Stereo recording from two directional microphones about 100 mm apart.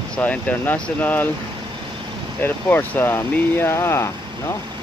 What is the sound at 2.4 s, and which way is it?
Speech, 20° left (ahead or behind).